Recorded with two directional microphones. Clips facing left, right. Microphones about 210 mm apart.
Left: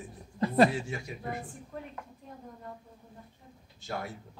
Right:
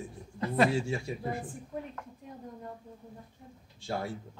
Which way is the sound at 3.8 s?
30° right (ahead or behind).